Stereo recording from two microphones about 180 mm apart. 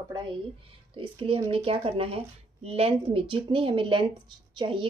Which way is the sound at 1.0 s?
30° right (ahead or behind).